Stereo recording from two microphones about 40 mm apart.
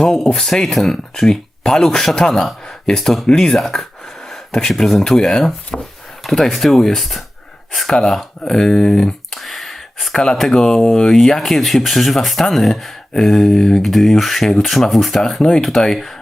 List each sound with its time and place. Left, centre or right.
0.0 s speech: centre
2.6 s a sound: centre
3.3 s speech: centre
5.7 s speech: left
6.3 s speech: centre